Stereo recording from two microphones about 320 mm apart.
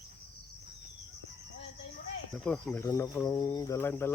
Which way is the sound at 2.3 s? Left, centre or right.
Centre.